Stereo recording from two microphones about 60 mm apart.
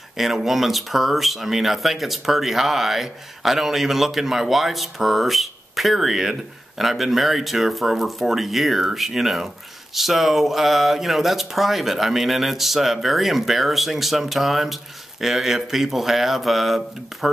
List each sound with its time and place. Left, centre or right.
0.2 s speech: centre